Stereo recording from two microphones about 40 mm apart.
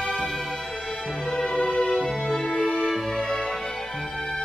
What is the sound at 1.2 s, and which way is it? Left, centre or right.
Music, centre.